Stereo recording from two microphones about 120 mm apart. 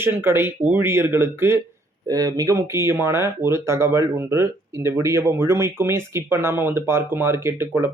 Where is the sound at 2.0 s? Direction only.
30° right (ahead or behind).